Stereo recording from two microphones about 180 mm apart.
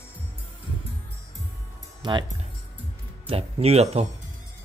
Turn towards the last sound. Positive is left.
turn(degrees=-35)  # may be behind; listen again after turning